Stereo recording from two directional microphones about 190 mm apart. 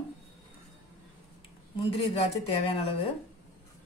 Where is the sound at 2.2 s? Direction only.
30° left (ahead or behind).